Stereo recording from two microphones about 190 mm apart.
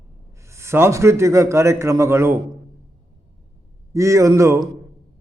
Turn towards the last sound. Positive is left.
turn(degrees=-15)  # may be behind; listen again after turning